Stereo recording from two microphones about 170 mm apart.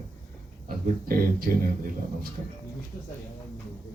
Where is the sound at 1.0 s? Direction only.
55° right (ahead or behind).